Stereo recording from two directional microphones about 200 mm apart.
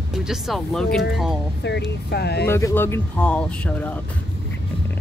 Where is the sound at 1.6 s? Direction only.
55° left (ahead or behind).